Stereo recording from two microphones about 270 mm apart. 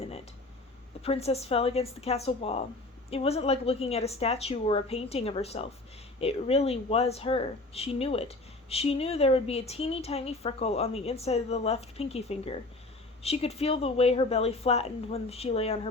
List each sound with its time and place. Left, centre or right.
1.0 s speech: left